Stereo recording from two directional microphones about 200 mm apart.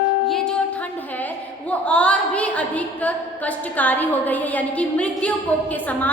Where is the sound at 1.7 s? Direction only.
5° left (ahead or behind).